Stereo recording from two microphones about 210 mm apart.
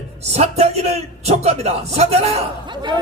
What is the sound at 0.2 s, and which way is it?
A man's voice, 30° right (ahead or behind).